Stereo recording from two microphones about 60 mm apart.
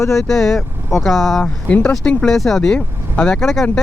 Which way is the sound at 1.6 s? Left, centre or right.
Left.